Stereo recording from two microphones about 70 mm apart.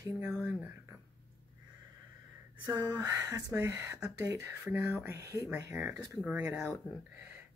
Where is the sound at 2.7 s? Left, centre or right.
Right.